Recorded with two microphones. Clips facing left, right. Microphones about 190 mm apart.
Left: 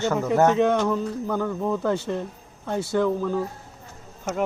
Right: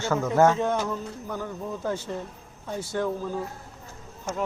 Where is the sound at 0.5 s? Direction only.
70° left (ahead or behind).